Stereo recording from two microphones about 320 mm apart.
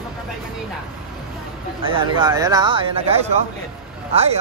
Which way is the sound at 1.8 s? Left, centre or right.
Centre.